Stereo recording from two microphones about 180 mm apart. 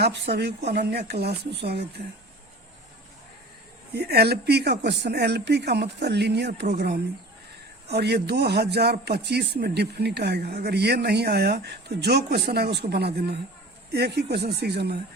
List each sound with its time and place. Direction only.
0.0 s a man's voice: 70° right (ahead or behind)
3.9 s a man's voice: 65° right (ahead or behind)